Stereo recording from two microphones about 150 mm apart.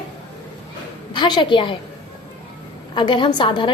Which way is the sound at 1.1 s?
30° left (ahead or behind).